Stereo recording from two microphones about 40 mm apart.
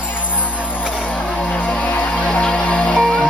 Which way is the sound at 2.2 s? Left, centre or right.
Left.